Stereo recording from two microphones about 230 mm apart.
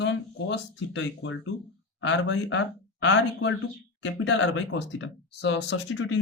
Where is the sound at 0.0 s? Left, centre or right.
Left.